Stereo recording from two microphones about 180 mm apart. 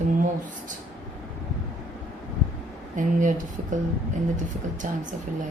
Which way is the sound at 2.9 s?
45° right (ahead or behind).